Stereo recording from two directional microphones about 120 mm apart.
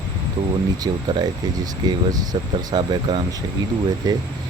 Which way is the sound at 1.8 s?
35° right (ahead or behind).